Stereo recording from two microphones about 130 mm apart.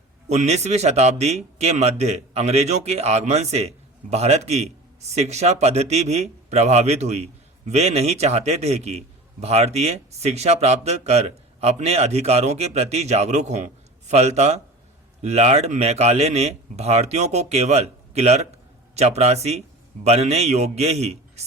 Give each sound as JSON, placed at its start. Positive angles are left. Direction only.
{"t": 0.3, "sound": "speech", "side_deg": -55}